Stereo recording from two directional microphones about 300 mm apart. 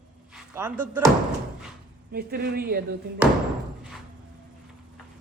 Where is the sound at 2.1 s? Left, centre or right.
Right.